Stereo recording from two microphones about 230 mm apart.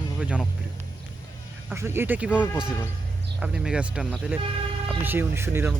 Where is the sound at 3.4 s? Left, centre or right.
Centre.